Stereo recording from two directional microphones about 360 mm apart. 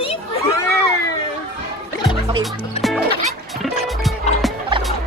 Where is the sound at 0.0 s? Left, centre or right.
Centre.